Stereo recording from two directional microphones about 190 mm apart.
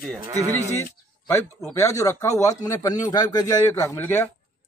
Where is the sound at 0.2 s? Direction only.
15° right (ahead or behind).